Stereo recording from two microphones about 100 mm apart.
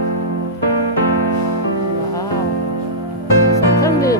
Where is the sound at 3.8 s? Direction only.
35° left (ahead or behind).